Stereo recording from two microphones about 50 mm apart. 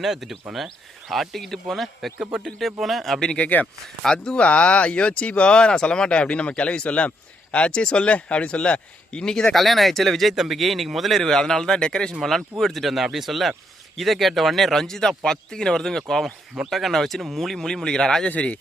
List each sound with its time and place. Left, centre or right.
0.0 s speech: centre
3.3 s speech: left
4.0 s speech: centre
9.6 s speech: centre
12.2 s speech: centre
18.3 s speech: left